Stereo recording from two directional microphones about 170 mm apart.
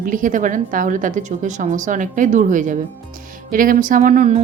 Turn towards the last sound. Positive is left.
turn(degrees=-50)  # may be behind; listen again after turning